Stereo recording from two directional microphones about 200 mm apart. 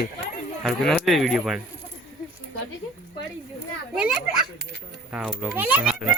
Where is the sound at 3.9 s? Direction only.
5° right (ahead or behind).